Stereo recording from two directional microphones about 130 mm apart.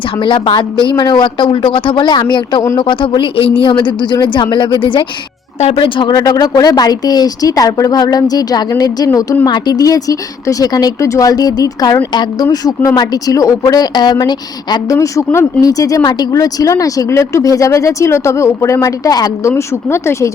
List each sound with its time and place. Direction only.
0.2 s a woman's voice: 40° left (ahead or behind)
9.1 s speech: 20° left (ahead or behind)
9.5 s speech: 30° left (ahead or behind)